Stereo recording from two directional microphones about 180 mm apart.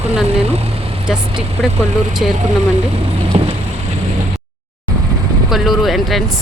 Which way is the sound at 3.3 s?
40° right (ahead or behind).